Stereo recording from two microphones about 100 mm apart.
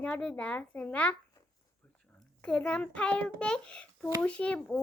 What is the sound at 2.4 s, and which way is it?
A child's voice, 10° left (ahead or behind).